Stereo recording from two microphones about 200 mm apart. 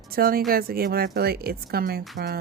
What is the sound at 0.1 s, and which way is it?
A woman's voice, 45° right (ahead or behind).